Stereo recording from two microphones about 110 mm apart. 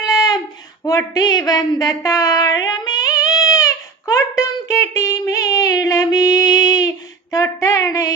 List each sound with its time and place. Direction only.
0.9 s speech: 35° left (ahead or behind)